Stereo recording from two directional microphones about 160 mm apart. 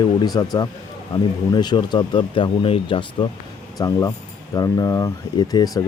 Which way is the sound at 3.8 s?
20° left (ahead or behind).